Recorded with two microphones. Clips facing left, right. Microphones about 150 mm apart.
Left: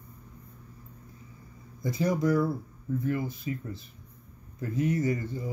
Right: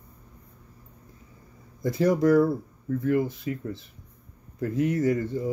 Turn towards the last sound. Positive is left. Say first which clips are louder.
# right 5 dB
turn(degrees=-65)  # may be behind; listen again after turning